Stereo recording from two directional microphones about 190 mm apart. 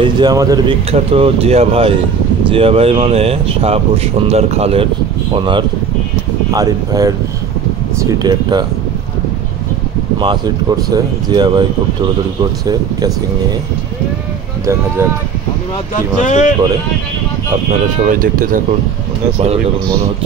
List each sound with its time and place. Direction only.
0.0 s speech: 20° right (ahead or behind)
0.9 s speech: 30° right (ahead or behind)
10.1 s speech: 20° right (ahead or behind)
16.2 s speech: 40° left (ahead or behind)
18.0 s speech: 45° right (ahead or behind)